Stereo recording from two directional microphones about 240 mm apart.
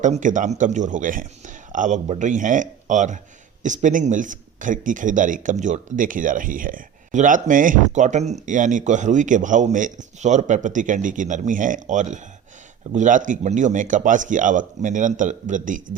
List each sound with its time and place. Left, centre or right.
0.0 s speech: right